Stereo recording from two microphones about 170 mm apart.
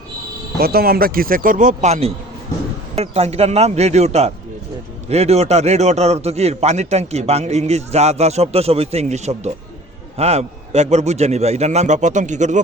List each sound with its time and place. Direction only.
0.6 s a man's voice: 65° right (ahead or behind); by 12.6 s 45° right (ahead or behind)